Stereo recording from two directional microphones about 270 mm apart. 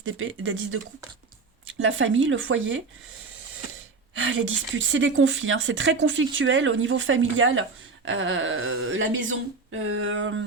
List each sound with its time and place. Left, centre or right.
0.0 s a woman's voice: right
1.8 s a woman's voice: right
4.1 s a woman's voice: right